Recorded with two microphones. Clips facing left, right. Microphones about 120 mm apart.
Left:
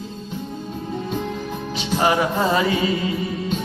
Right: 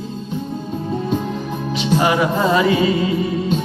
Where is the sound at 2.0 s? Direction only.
35° left (ahead or behind).